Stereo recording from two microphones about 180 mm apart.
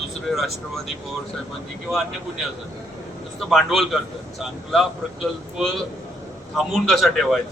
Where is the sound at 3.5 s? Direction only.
Centre (ahead or behind).